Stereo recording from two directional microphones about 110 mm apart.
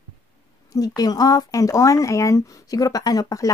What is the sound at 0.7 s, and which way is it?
Speech, 35° left (ahead or behind).